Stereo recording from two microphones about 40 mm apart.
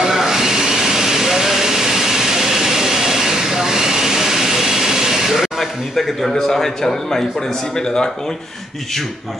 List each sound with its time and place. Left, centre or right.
0.0 s a sound: centre
5.6 s speech: centre
7.7 s speech: centre